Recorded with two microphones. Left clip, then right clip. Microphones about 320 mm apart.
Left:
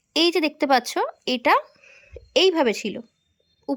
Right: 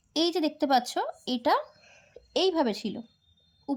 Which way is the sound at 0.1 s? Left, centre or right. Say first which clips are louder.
Left 7 dB; centre.